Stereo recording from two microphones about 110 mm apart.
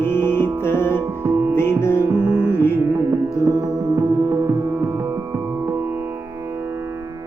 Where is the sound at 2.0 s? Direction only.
10° right (ahead or behind).